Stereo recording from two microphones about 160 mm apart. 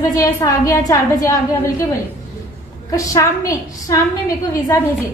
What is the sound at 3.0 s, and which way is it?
A woman's voice, 20° left (ahead or behind).